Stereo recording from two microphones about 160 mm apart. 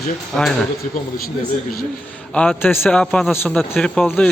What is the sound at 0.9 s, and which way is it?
Speech, 65° left (ahead or behind).